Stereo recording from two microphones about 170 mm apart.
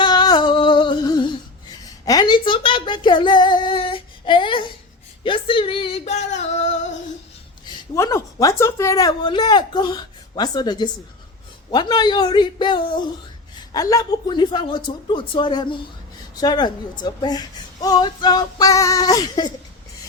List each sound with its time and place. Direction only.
0.0 s humming: 25° left (ahead or behind)
1.8 s speech: 20° left (ahead or behind)
5.2 s female singing: 30° left (ahead or behind)
7.6 s a woman's voice: 20° left (ahead or behind)